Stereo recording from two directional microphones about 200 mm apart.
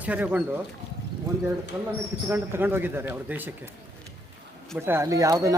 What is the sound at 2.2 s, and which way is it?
Speech, 10° right (ahead or behind).